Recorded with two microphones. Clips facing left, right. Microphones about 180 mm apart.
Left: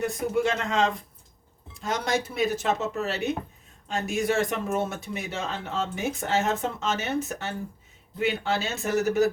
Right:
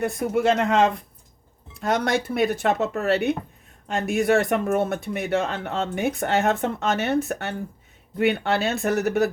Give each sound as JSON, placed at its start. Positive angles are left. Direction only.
{"t": 0.0, "sound": "speech", "side_deg": -65}